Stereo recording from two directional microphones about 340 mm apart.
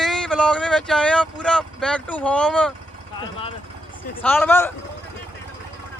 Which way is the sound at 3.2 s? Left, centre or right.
Centre.